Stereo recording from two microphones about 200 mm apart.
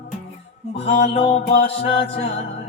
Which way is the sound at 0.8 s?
30° left (ahead or behind).